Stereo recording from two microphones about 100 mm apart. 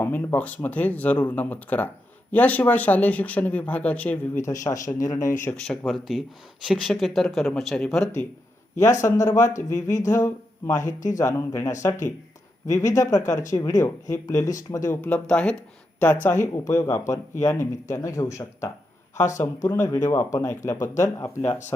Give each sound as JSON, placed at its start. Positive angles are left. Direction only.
{"t": 0.0, "sound": "speech", "side_deg": 20}
{"t": 4.4, "sound": "speech", "side_deg": 30}
{"t": 5.6, "sound": "speech", "side_deg": 0}
{"t": 8.8, "sound": "speech", "side_deg": 30}
{"t": 15.0, "sound": "speech", "side_deg": 10}